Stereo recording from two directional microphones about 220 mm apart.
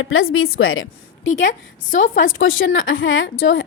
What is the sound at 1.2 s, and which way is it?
Speech, 35° left (ahead or behind).